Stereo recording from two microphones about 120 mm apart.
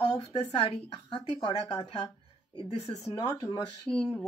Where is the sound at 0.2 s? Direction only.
55° left (ahead or behind); by 3.6 s 35° left (ahead or behind).